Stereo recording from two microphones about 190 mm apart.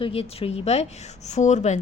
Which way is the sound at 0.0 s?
30° left (ahead or behind).